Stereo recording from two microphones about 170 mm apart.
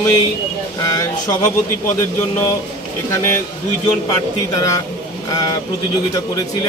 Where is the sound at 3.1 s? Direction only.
15° left (ahead or behind).